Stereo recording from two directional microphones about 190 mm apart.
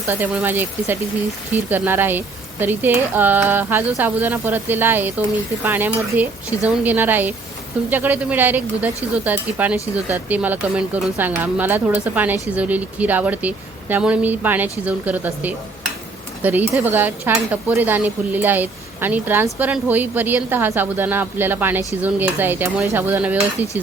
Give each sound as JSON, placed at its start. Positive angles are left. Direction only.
{"t": 0.1, "sound": "speech", "side_deg": -10}